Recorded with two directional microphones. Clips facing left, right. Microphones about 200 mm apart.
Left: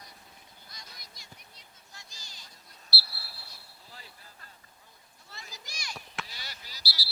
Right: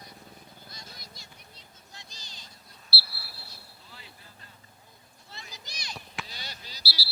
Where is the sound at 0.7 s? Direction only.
30° right (ahead or behind).